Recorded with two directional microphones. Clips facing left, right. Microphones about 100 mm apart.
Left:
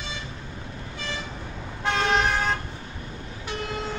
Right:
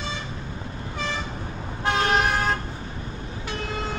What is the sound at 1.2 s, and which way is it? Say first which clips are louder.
Toot: right 3 dB; 30° right (ahead or behind).